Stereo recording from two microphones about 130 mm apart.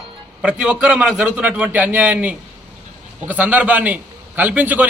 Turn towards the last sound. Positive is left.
turn(degrees=-15)  # may be behind; listen again after turning